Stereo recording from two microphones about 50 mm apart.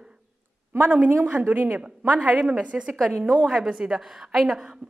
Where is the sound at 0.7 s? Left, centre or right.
Right; by 4.7 s centre.